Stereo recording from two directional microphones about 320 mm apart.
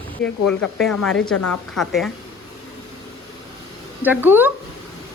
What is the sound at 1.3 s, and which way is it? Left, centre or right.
Speech, left.